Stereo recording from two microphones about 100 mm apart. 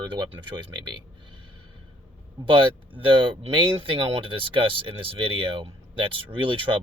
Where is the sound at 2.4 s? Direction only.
55° right (ahead or behind).